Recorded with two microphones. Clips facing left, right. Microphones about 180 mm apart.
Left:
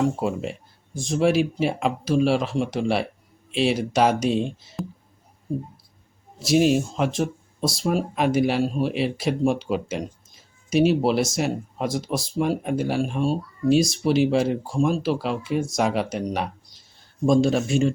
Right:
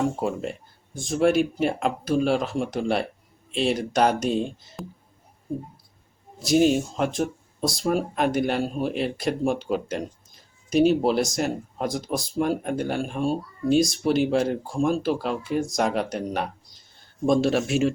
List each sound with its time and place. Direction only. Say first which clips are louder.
0.0 s speech: left 2 dB; centre (ahead or behind)
6.4 s speech: left 1 dB; centre (ahead or behind)